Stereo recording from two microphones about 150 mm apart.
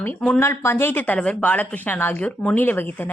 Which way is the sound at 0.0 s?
5° left (ahead or behind).